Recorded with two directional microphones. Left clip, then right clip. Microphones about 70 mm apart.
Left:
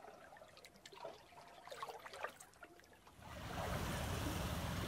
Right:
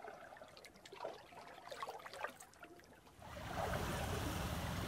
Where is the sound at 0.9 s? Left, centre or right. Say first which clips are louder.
Right 4 dB; left.